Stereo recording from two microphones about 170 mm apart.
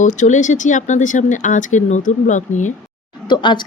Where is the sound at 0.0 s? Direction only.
45° left (ahead or behind).